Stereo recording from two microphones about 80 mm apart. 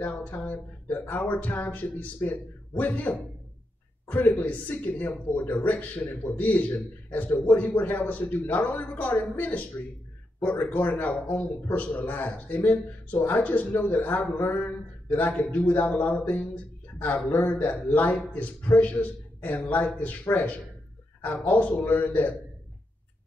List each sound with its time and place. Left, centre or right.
0.0 s speech: centre